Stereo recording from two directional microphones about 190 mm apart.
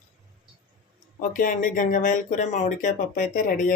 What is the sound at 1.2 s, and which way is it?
Speech, 45° left (ahead or behind).